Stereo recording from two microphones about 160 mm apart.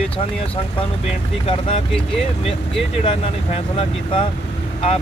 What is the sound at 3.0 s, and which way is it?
Speech, 35° left (ahead or behind).